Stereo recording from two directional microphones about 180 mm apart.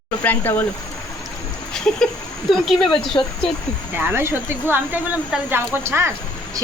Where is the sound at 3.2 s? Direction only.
20° left (ahead or behind).